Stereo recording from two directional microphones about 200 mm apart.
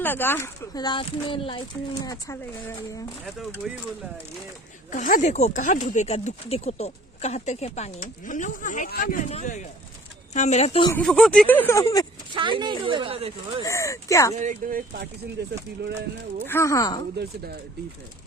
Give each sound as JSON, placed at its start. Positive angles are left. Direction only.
{"t": 0.0, "sound": "speech", "side_deg": 10}
{"t": 4.9, "sound": "speech", "side_deg": 40}
{"t": 10.9, "sound": "speech", "side_deg": 5}
{"t": 12.3, "sound": "speech", "side_deg": -25}
{"t": 13.7, "sound": "speech", "side_deg": 15}
{"t": 14.3, "sound": "speech", "side_deg": -40}
{"t": 16.5, "sound": "speech", "side_deg": 15}
{"t": 17.2, "sound": "speech", "side_deg": -50}